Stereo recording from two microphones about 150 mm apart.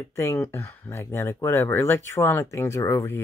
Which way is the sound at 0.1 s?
20° left (ahead or behind).